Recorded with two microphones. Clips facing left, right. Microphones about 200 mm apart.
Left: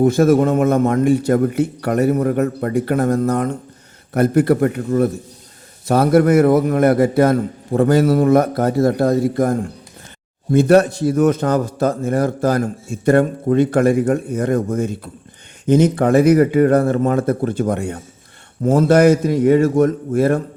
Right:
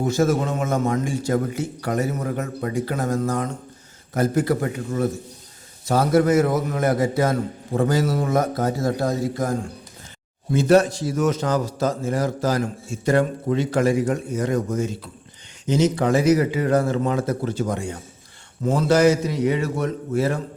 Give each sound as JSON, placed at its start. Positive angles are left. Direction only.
{"t": 0.0, "sound": "a man's voice", "side_deg": 55}